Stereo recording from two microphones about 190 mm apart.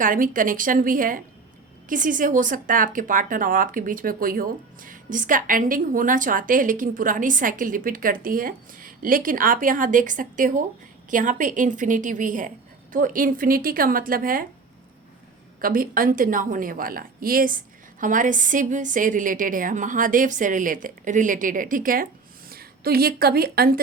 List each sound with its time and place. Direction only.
0.0 s speech: 45° right (ahead or behind)
15.6 s speech: 50° right (ahead or behind)